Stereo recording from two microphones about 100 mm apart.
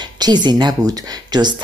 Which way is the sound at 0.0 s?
45° right (ahead or behind).